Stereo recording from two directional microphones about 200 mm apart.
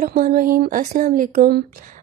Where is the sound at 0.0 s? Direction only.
45° right (ahead or behind).